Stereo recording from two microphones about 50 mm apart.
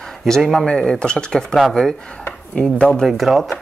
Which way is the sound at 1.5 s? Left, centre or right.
Centre.